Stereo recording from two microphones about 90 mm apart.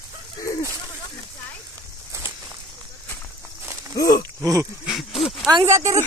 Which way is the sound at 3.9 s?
40° left (ahead or behind).